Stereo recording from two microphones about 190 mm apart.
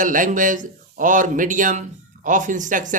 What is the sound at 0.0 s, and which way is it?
Speech, 45° right (ahead or behind).